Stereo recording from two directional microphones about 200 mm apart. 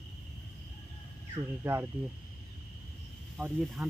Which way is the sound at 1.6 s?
10° right (ahead or behind).